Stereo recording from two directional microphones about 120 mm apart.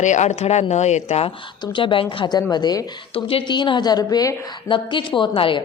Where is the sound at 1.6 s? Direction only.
45° left (ahead or behind).